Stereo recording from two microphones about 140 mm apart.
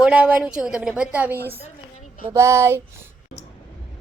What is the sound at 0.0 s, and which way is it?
A woman's voice, 10° right (ahead or behind).